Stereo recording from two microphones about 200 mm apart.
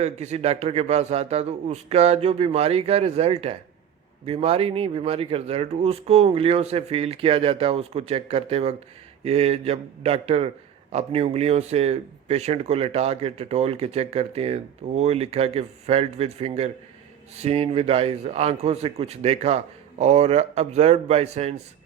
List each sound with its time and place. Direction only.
0.0 s speech: 35° right (ahead or behind)